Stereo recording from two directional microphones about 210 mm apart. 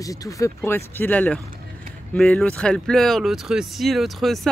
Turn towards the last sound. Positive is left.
turn(degrees=0)  # may be behind; listen again after turning